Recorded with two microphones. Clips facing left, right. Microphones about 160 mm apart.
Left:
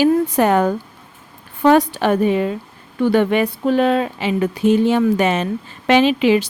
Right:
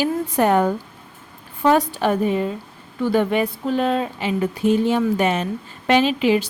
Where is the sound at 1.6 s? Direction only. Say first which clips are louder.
Left 4 dB; 75° left (ahead or behind).